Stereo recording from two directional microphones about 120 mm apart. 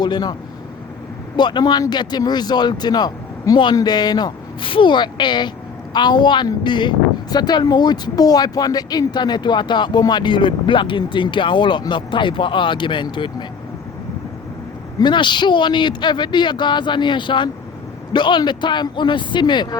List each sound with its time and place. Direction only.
0.0 s a woman's voice: 35° left (ahead or behind)
1.4 s a woman's voice: 40° left (ahead or behind)
15.0 s a woman's voice: 40° left (ahead or behind)